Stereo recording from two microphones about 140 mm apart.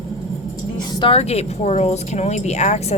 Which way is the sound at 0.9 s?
40° left (ahead or behind).